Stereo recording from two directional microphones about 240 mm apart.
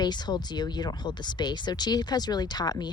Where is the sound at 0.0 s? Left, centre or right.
Centre.